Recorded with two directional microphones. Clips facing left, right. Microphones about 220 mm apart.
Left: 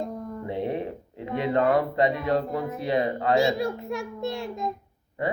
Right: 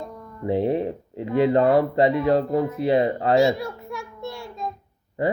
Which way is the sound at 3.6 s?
20° left (ahead or behind).